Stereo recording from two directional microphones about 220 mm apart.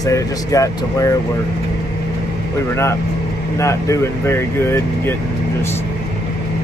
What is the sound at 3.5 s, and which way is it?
Speech, 15° left (ahead or behind).